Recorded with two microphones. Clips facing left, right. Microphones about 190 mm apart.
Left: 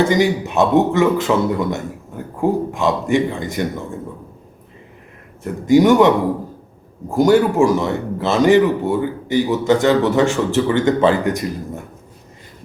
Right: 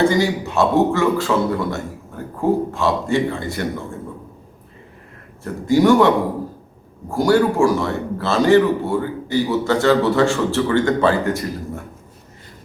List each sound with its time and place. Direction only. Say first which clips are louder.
0.1 s a man's voice: left 2 dB; 20° left (ahead or behind)
5.4 s a man's voice: left 3 dB; 20° left (ahead or behind)